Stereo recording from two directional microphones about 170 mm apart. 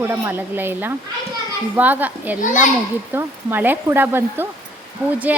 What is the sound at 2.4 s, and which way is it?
Speech, 50° left (ahead or behind).